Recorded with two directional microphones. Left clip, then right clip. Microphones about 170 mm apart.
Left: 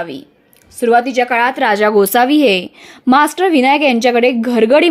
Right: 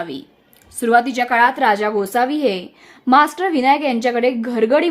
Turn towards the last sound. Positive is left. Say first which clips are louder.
# left 5 dB
turn(degrees=30)  # may be behind; listen again after turning